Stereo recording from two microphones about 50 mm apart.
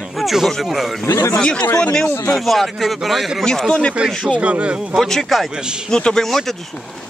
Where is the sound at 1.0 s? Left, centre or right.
Left.